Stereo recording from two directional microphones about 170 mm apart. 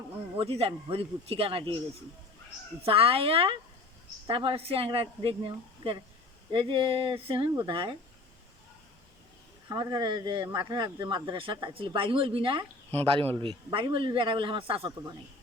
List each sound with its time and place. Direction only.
0.3 s speech: 35° right (ahead or behind)
2.8 s speech: 35° right (ahead or behind)
9.6 s speech: 25° right (ahead or behind)